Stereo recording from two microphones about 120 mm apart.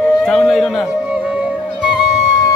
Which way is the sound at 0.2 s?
5° left (ahead or behind).